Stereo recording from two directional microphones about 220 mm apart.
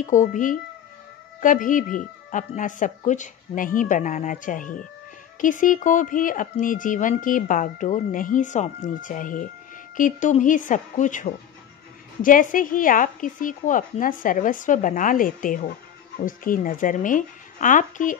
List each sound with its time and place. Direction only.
0.0 s a woman's voice: 35° left (ahead or behind)